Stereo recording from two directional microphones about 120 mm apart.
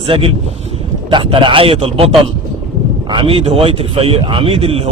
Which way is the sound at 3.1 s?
45° right (ahead or behind).